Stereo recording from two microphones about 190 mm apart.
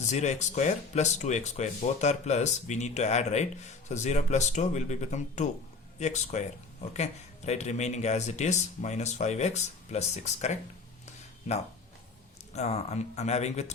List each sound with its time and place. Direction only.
0.0 s speech: 40° left (ahead or behind)
11.0 s a sound: 35° left (ahead or behind)
12.5 s speech: 35° left (ahead or behind)